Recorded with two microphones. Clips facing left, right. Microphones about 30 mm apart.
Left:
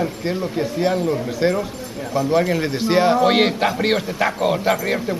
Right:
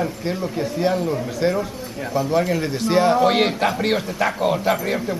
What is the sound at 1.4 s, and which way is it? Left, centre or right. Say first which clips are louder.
A man's voice: left 1 dB; centre.